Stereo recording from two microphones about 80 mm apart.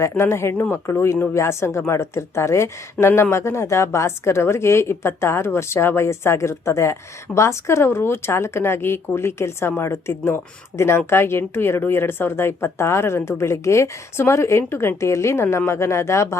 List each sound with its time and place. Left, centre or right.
0.0 s speech: left